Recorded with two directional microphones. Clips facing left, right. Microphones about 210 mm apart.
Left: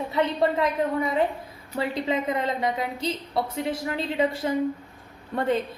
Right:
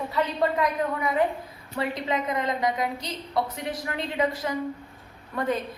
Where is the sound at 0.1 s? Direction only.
25° left (ahead or behind).